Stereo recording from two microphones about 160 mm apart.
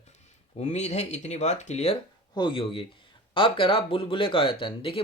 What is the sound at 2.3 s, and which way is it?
Speech, 30° left (ahead or behind).